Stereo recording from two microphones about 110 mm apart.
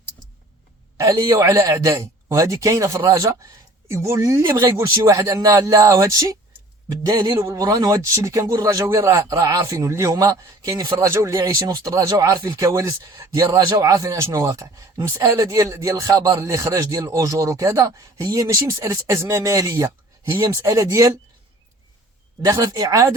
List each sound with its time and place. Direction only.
0.9 s speech: 30° right (ahead or behind)
22.4 s speech: 40° right (ahead or behind)